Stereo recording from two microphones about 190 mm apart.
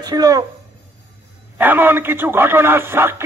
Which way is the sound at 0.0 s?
20° right (ahead or behind).